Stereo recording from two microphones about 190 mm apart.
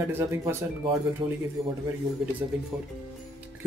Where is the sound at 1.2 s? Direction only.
25° right (ahead or behind).